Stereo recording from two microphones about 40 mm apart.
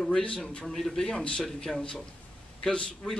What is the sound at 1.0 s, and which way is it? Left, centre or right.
Speech, left.